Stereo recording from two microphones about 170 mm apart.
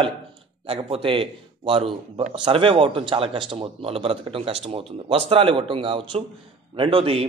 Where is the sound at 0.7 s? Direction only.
35° right (ahead or behind).